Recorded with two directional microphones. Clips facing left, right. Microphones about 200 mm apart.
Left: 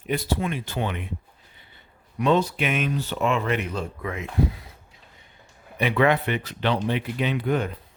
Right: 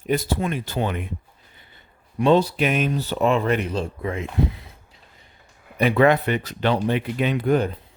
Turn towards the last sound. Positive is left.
turn(degrees=-40)  # may be behind; listen again after turning